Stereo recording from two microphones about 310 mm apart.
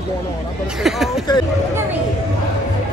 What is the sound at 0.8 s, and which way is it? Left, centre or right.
Speech, centre.